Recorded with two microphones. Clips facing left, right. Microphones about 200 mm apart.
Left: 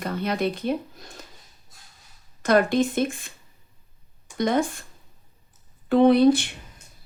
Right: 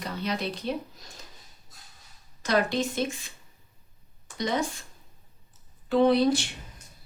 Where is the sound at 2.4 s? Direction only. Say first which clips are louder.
Left 6 dB; 55° left (ahead or behind).